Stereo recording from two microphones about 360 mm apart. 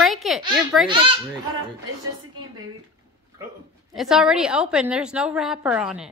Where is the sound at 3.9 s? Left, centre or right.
Centre.